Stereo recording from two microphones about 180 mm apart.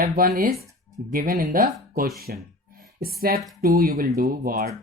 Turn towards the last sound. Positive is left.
turn(degrees=-50)  # may be behind; listen again after turning